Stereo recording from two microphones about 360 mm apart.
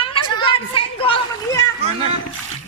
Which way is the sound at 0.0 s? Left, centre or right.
Centre.